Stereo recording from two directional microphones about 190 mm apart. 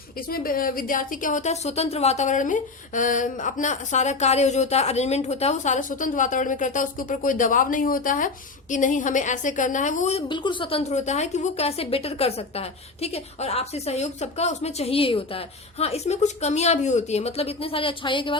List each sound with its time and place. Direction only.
0.2 s a woman's voice: 50° left (ahead or behind); by 18.3 s 25° left (ahead or behind)